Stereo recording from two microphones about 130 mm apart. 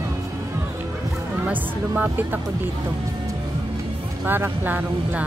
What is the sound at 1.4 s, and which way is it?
Speech, 15° right (ahead or behind).